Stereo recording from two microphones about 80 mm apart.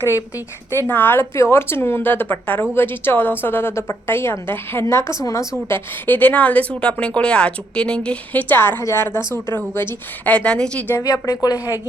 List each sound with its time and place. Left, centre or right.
0.9 s a woman's voice: left
5.7 s a woman's voice: left
11.0 s speech: left